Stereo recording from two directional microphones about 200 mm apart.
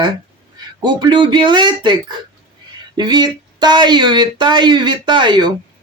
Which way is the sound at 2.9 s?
20° right (ahead or behind).